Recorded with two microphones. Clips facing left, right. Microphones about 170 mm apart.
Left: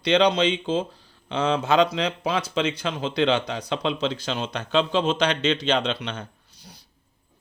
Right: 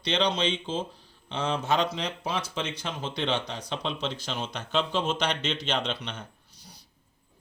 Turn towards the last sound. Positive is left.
turn(degrees=80)